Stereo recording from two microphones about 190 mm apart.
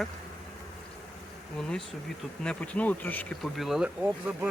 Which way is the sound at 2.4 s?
5° left (ahead or behind).